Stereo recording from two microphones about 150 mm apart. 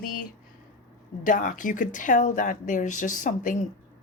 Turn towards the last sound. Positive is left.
turn(degrees=60)  # may be behind; listen again after turning